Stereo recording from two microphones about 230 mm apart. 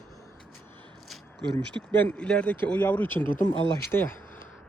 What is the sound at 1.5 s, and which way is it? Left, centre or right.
Speech, centre.